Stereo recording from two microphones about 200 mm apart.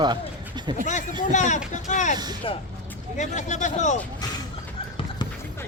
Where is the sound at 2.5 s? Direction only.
25° left (ahead or behind).